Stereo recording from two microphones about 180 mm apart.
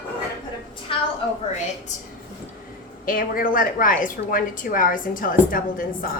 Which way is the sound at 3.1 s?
50° left (ahead or behind).